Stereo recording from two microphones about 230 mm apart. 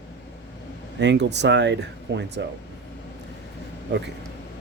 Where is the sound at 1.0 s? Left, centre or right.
Right.